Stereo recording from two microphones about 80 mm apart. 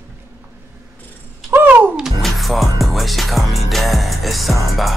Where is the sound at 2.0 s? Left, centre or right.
Centre.